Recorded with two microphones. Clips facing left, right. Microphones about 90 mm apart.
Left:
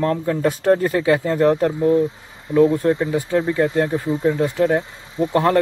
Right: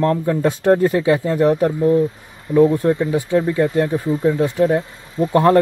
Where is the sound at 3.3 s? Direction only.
25° left (ahead or behind).